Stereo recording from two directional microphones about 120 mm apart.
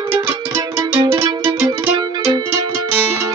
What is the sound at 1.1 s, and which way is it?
Music, 15° right (ahead or behind).